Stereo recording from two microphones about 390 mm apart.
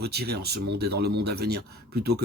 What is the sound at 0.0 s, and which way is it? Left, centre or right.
Speech, right.